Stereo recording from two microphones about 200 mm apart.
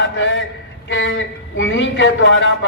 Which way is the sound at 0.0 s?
70° left (ahead or behind).